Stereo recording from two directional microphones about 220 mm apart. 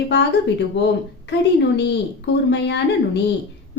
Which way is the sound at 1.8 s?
50° left (ahead or behind).